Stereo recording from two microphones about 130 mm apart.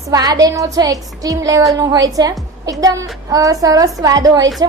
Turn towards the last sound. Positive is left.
turn(degrees=-30)  # may be behind; listen again after turning